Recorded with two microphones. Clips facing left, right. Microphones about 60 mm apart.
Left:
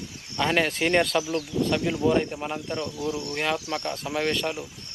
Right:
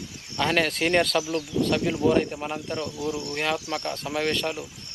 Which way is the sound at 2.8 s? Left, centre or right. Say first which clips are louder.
Even; left.